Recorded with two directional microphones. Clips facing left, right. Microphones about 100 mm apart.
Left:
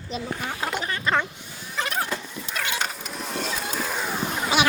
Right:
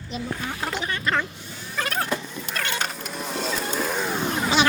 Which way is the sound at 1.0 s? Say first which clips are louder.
Left 2 dB; 20° left (ahead or behind).